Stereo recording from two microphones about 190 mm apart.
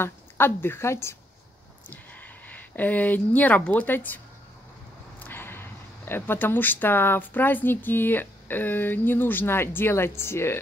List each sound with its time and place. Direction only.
0.0 s a woman's voice: 10° left (ahead or behind)
5.2 s speech: 10° left (ahead or behind)